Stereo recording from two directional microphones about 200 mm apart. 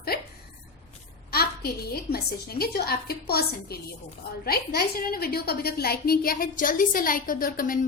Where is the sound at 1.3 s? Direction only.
50° left (ahead or behind).